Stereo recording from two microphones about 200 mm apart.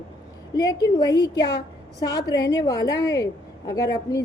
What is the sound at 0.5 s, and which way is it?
A woman's voice, 20° left (ahead or behind).